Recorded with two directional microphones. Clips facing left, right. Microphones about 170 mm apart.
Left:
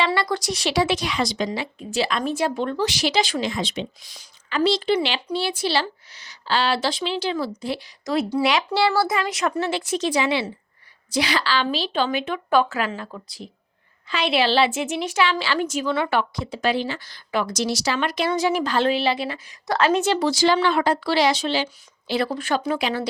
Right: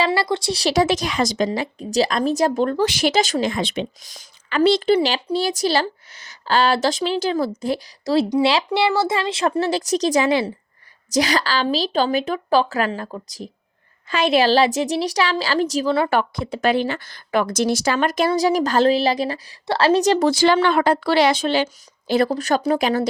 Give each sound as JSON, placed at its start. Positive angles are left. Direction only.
{"t": 0.0, "sound": "a woman's voice", "side_deg": -30}
{"t": 4.9, "sound": "a woman's voice", "side_deg": -40}